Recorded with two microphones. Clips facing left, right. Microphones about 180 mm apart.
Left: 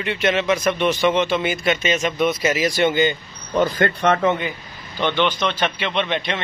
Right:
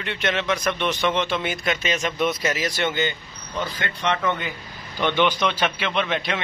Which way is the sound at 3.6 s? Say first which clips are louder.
Left 9 dB; 50° left (ahead or behind).